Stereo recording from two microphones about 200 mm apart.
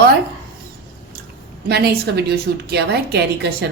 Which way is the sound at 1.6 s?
55° right (ahead or behind).